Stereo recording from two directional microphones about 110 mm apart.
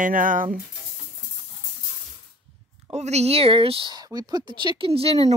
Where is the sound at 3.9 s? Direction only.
35° right (ahead or behind).